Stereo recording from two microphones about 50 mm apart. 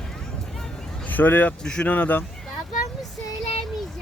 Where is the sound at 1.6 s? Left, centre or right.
Centre.